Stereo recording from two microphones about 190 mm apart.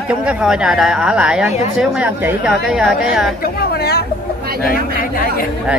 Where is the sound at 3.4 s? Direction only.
55° left (ahead or behind).